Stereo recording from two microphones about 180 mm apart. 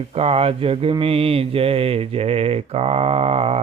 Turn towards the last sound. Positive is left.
turn(degrees=-35)  # may be behind; listen again after turning